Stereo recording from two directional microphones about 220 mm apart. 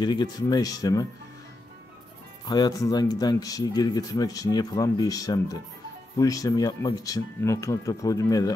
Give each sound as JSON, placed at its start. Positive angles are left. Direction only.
{"t": 0.0, "sound": "speech", "side_deg": 20}
{"t": 2.4, "sound": "speech", "side_deg": 20}